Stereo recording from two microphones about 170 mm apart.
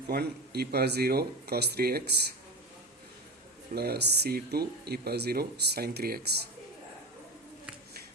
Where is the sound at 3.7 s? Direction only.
70° right (ahead or behind).